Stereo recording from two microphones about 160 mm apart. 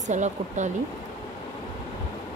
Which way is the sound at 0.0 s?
45° right (ahead or behind).